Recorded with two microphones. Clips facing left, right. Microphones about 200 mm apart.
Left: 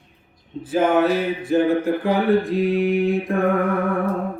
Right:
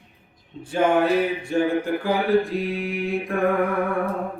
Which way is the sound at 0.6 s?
5° left (ahead or behind).